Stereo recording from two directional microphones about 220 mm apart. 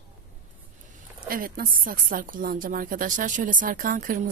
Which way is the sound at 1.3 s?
40° right (ahead or behind).